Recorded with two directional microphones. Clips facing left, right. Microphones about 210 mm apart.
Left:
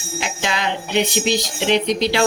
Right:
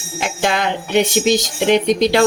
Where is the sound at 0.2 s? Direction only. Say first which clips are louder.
Right 5 dB; 50° right (ahead or behind).